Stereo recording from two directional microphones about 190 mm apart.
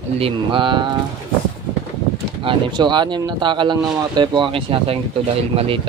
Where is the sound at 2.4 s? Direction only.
25° right (ahead or behind).